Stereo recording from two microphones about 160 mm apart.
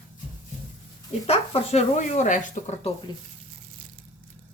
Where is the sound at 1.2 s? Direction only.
40° left (ahead or behind).